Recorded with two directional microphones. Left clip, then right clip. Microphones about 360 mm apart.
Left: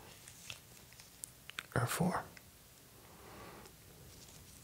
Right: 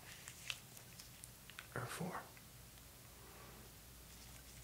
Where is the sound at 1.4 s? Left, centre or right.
Left.